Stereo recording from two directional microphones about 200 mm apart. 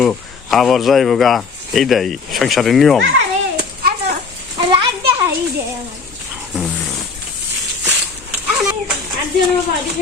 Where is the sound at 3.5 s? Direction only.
35° right (ahead or behind).